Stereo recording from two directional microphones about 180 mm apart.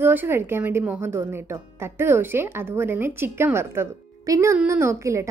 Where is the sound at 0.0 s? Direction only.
10° right (ahead or behind).